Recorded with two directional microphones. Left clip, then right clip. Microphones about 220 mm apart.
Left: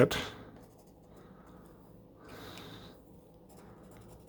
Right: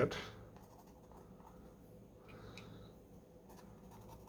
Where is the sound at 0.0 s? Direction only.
50° left (ahead or behind).